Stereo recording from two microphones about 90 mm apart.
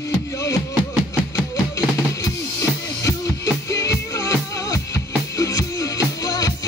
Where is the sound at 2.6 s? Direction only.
35° left (ahead or behind).